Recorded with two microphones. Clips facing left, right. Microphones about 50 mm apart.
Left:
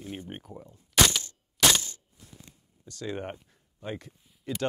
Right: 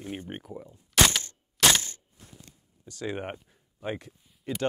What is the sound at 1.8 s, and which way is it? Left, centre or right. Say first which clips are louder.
Coin: right 1 dB; right.